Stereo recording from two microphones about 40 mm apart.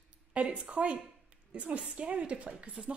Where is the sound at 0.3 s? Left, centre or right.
Right.